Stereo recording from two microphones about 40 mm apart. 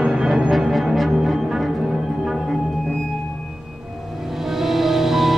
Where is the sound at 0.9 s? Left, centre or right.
Centre.